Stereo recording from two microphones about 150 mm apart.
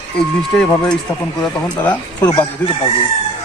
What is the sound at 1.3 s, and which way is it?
Speech, 10° left (ahead or behind).